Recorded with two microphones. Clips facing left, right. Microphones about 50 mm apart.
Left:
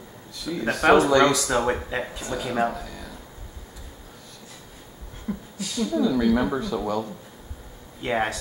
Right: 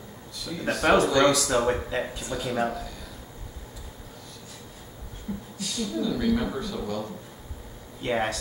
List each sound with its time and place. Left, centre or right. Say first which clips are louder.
0.5 s speech: left 4 dB; centre
5.3 s a sound: left 3 dB; left
5.6 s speech: left 5 dB; centre
6.3 s speech: left 4 dB; centre